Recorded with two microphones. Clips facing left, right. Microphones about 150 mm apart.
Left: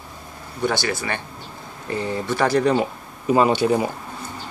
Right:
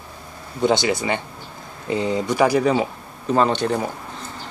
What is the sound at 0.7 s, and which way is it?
Speech, 20° right (ahead or behind).